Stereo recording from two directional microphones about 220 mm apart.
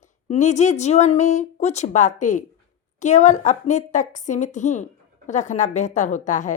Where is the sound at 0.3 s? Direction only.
30° left (ahead or behind).